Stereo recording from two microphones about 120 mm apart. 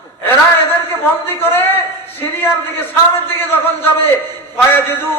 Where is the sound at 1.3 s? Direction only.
20° left (ahead or behind).